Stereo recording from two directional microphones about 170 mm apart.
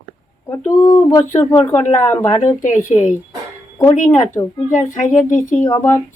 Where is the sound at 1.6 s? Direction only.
15° left (ahead or behind).